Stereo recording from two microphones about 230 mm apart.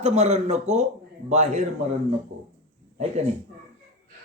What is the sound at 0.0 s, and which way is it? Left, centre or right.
A man's voice, right.